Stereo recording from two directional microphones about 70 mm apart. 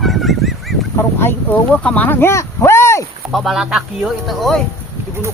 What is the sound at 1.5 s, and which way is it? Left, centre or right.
Speech, left.